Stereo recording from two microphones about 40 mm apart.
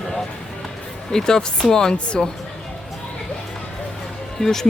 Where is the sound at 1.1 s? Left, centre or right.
Centre.